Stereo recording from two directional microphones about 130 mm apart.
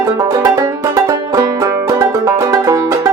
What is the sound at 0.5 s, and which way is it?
Music, 25° right (ahead or behind).